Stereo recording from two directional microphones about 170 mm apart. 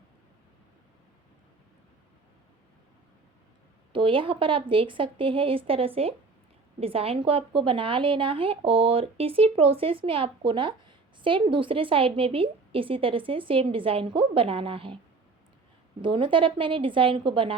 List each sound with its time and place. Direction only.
3.9 s a woman's voice: 30° right (ahead or behind)
16.0 s a woman's voice: 30° right (ahead or behind)